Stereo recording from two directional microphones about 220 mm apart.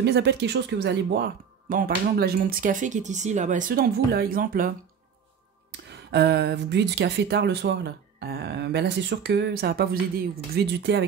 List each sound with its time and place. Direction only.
0.0 s speech: 50° right (ahead or behind)
5.7 s speech: 50° right (ahead or behind)